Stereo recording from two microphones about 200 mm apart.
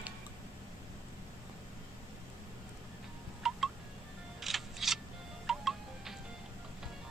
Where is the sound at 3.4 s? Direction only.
Centre (ahead or behind).